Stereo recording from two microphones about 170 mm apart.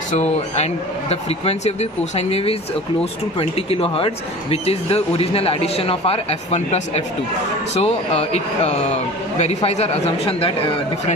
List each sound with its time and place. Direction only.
0.1 s speech: 40° left (ahead or behind)